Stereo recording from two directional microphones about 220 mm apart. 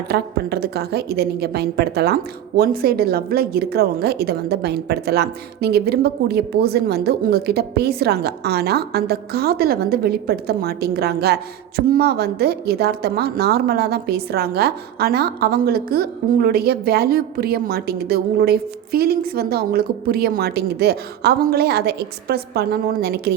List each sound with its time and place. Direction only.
0.1 s a woman's voice: 45° right (ahead or behind)